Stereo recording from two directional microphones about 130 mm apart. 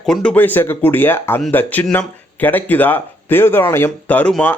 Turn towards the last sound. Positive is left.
turn(degrees=10)  # may be behind; listen again after turning